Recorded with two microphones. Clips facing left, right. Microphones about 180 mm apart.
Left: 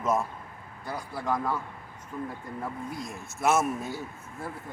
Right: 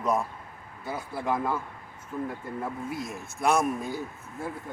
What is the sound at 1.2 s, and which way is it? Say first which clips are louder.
Speech: right 1 dB; 5° right (ahead or behind).